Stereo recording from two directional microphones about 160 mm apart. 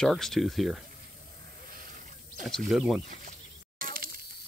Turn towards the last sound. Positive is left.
turn(degrees=-65)  # may be behind; listen again after turning